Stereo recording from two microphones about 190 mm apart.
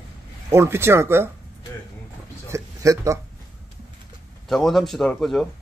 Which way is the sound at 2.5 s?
15° right (ahead or behind).